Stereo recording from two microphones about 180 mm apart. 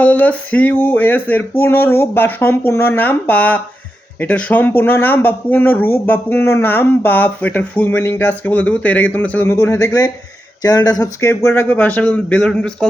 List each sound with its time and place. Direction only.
0.0 s speech: 10° left (ahead or behind)